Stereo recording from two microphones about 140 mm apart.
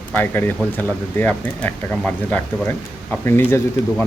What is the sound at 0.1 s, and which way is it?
Speech, 15° left (ahead or behind).